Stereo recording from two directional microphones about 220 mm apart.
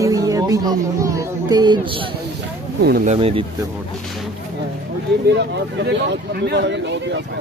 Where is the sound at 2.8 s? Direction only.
45° right (ahead or behind).